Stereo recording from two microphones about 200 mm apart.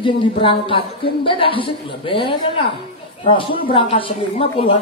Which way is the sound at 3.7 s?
30° left (ahead or behind).